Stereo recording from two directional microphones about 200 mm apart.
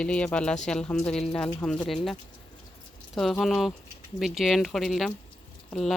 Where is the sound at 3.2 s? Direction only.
Centre (ahead or behind).